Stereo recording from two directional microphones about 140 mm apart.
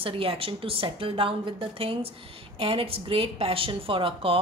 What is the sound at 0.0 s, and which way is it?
A woman's voice, 40° right (ahead or behind).